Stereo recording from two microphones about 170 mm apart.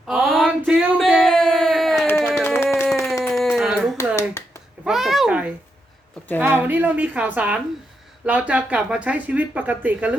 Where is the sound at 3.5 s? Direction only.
Centre (ahead or behind).